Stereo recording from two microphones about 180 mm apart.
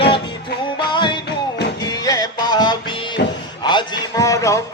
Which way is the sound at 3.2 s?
70° left (ahead or behind).